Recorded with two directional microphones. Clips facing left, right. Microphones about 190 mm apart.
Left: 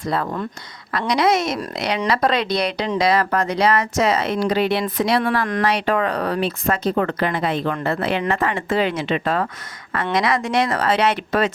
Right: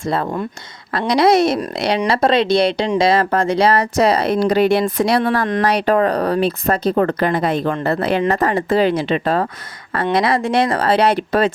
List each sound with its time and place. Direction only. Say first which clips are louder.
0.1 s speech: right 3 dB; 25° right (ahead or behind)